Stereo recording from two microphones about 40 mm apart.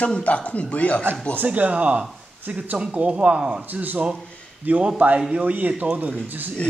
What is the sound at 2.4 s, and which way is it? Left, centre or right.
Speech, right.